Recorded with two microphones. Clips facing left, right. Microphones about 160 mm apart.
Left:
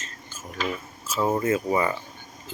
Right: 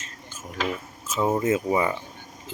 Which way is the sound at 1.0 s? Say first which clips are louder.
Even; 20° right (ahead or behind).